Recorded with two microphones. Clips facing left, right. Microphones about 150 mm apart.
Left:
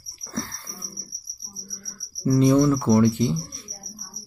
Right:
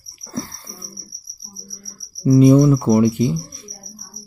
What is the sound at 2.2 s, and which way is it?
Speech, 10° right (ahead or behind).